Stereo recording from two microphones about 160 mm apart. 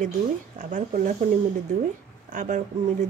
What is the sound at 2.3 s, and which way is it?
Speech, 50° right (ahead or behind).